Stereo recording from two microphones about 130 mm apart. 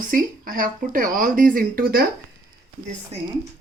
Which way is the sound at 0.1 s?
90° right.